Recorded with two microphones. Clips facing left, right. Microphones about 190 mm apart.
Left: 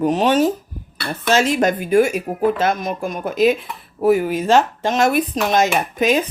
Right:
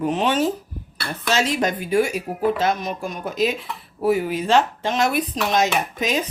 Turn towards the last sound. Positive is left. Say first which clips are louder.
# left 6 dB
turn(degrees=55)  # may be behind; listen again after turning